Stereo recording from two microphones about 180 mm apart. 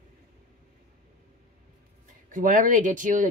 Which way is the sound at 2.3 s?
50° right (ahead or behind).